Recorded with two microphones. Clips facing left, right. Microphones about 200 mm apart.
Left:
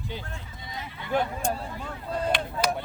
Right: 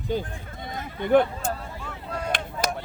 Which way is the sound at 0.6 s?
50° right (ahead or behind).